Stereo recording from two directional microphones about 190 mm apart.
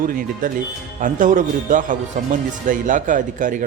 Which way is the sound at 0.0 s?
45° right (ahead or behind).